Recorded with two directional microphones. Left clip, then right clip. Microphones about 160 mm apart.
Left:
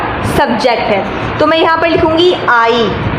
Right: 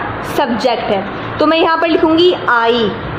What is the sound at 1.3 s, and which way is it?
A woman's voice, 45° right (ahead or behind).